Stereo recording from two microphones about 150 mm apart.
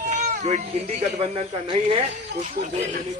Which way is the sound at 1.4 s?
40° right (ahead or behind).